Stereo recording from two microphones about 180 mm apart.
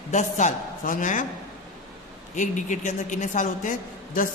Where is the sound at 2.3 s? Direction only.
45° left (ahead or behind).